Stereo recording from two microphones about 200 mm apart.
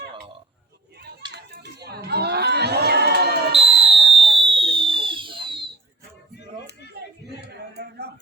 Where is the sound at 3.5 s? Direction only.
30° right (ahead or behind).